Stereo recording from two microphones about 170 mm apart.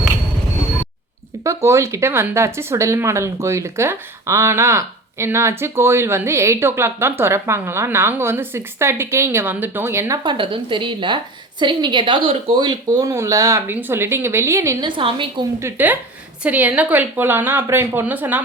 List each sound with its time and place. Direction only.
1.5 s speech: 15° right (ahead or behind)
10.2 s speech: 30° right (ahead or behind)
14.8 s speech: 30° right (ahead or behind)
15.6 s speech: 10° right (ahead or behind)